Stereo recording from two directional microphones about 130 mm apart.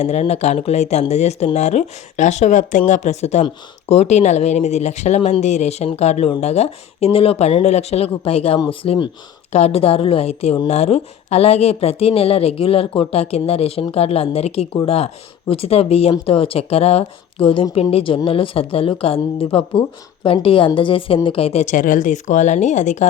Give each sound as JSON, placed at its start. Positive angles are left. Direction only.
{"t": 0.0, "sound": "a woman's voice", "side_deg": 55}
{"t": 9.5, "sound": "a woman's voice", "side_deg": 55}